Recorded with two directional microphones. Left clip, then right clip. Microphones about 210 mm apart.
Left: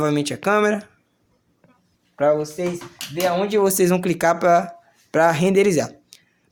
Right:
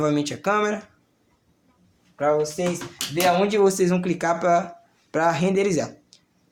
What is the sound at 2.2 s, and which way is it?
Speech, 50° left (ahead or behind).